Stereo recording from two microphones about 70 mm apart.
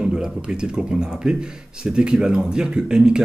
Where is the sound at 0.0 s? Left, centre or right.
Centre.